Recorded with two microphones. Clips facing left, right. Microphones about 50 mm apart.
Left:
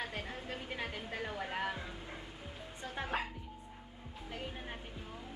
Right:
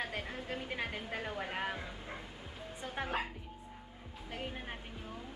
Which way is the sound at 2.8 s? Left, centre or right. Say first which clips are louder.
Right 2 dB; right.